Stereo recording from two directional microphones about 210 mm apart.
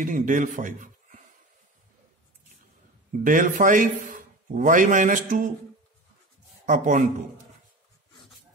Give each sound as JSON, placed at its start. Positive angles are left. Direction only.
{"t": 0.0, "sound": "a man's voice", "side_deg": -40}
{"t": 3.1, "sound": "a man's voice", "side_deg": -40}
{"t": 6.6, "sound": "speech", "side_deg": -35}